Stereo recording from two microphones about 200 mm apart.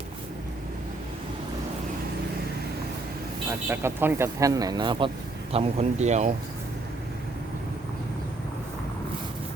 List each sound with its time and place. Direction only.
3.7 s speech: 10° right (ahead or behind); by 6.3 s 35° right (ahead or behind)